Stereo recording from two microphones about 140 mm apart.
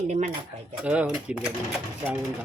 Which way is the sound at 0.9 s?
10° right (ahead or behind).